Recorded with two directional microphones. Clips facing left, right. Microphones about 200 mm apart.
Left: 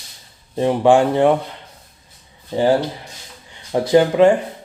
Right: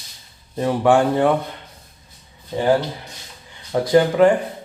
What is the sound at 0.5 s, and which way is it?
Speech, 25° left (ahead or behind).